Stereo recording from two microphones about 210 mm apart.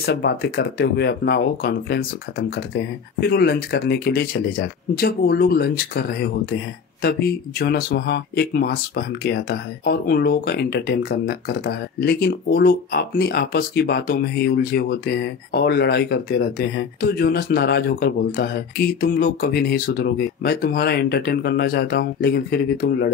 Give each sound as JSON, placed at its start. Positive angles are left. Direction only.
{"t": 0.0, "sound": "speech", "side_deg": 50}